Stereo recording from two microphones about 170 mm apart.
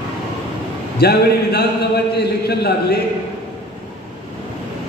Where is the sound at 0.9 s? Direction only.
70° left (ahead or behind).